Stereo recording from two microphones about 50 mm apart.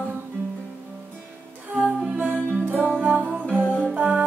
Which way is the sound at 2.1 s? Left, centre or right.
Right.